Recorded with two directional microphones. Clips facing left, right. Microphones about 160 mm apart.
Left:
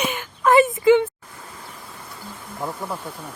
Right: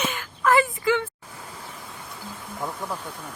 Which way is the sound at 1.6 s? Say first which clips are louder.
Even; centre (ahead or behind).